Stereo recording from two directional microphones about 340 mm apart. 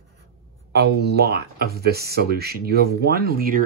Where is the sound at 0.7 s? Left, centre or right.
Right.